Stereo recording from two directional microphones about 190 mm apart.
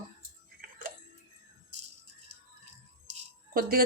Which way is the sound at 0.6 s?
50° right (ahead or behind).